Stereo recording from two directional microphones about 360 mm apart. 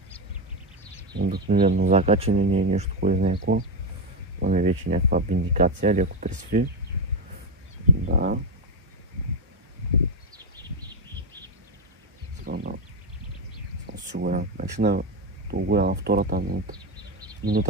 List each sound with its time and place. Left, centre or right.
1.1 s speech: right
8.1 s speech: right
12.4 s a sound: right
14.1 s speech: right